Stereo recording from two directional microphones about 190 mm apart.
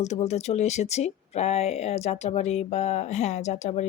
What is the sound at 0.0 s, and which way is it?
Speech, 35° left (ahead or behind).